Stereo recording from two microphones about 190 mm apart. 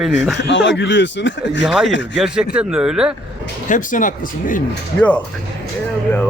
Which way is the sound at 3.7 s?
45° left (ahead or behind).